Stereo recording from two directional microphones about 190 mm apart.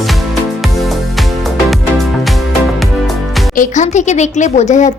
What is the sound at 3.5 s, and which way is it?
A woman's voice, 40° left (ahead or behind).